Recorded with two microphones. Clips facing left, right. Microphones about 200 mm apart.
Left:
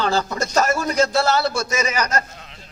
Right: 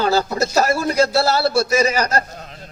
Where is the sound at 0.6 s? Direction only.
35° right (ahead or behind).